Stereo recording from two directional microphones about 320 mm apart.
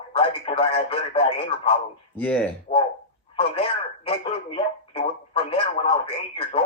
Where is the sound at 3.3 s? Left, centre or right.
Centre.